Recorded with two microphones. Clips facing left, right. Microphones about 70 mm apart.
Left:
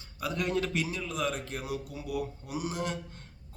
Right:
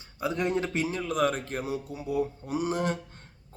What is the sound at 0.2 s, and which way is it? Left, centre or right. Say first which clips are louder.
Speech: right 3 dB; right.